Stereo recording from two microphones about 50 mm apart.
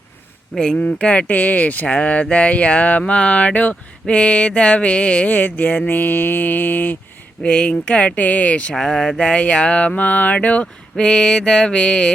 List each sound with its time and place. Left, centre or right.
0.6 s speech: centre
4.0 s mantra: left
7.4 s speech: left
8.7 s mantra: centre